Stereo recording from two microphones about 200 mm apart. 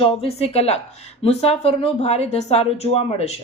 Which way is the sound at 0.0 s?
30° left (ahead or behind).